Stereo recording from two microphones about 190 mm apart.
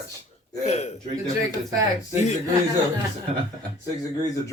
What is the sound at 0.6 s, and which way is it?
Speech, 35° left (ahead or behind).